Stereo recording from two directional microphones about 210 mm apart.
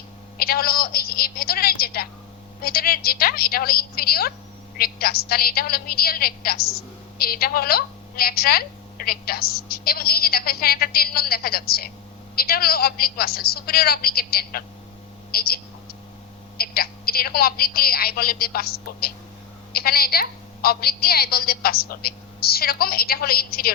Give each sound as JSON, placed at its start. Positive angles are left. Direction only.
{"t": 0.3, "sound": "a woman's voice", "side_deg": 45}